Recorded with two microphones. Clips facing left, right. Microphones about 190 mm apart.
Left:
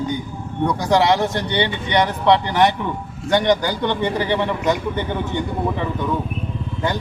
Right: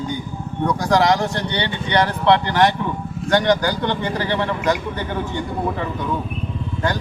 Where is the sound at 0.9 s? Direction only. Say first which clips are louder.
Left 1 dB; 25° left (ahead or behind).